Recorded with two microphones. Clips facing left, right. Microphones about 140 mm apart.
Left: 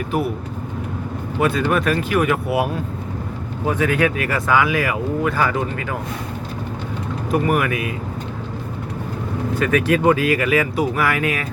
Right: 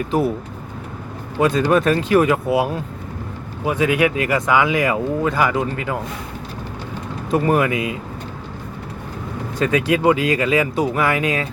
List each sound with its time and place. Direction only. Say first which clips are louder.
1.4 s speech: right 3 dB; 20° right (ahead or behind)
3.7 s speech: right 1 dB; 15° right (ahead or behind)
7.3 s speech: right 2 dB; 25° right (ahead or behind)
9.7 s speech: even; 15° right (ahead or behind)